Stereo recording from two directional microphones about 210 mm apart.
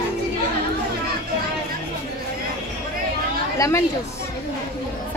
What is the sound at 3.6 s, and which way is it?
Chatter, 15° left (ahead or behind).